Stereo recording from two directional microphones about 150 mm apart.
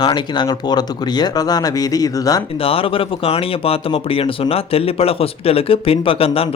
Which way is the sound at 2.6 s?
40° left (ahead or behind).